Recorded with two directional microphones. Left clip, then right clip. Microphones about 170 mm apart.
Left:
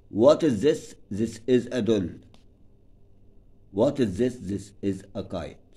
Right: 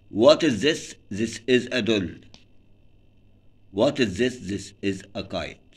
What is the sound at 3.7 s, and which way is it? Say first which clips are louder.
A man's voice: right 2 dB; 45° left (ahead or behind).